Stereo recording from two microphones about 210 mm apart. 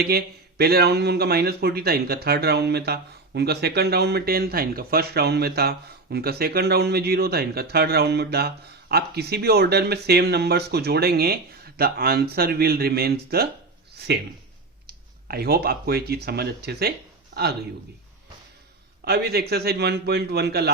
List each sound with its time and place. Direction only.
0.0 s speech: 50° right (ahead or behind)
19.0 s speech: 50° right (ahead or behind)